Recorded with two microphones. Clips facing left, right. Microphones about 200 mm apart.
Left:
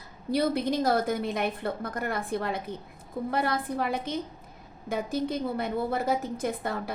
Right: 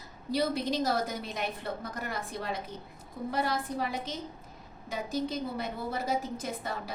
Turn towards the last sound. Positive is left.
turn(degrees=55)  # may be behind; listen again after turning